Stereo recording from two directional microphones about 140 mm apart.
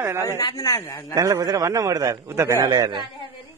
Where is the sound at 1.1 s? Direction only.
25° right (ahead or behind).